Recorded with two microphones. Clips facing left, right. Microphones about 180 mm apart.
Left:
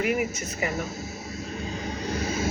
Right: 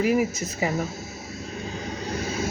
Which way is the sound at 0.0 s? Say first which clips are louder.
Right 4 dB; 35° right (ahead or behind).